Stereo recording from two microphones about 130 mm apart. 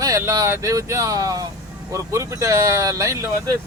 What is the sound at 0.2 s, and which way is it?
Speech, 25° right (ahead or behind).